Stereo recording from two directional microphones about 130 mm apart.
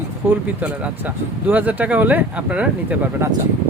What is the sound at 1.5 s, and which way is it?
Speech, 15° right (ahead or behind).